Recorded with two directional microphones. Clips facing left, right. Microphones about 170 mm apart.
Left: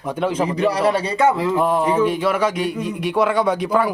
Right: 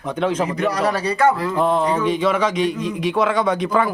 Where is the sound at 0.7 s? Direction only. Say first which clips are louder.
Left 2 dB; 30° left (ahead or behind).